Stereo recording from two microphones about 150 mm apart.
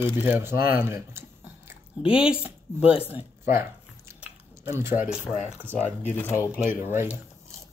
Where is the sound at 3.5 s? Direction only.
15° right (ahead or behind).